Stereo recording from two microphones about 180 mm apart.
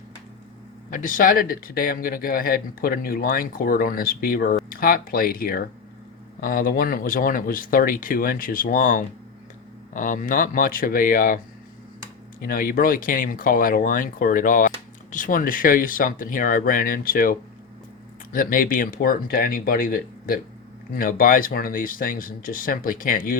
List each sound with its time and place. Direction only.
0.9 s speech: 45° left (ahead or behind)
12.4 s speech: 55° left (ahead or behind)